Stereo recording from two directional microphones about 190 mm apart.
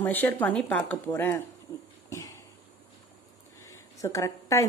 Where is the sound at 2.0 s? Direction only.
15° left (ahead or behind).